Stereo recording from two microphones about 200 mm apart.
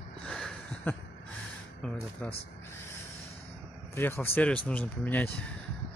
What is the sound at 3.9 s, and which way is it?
Speech, 10° left (ahead or behind).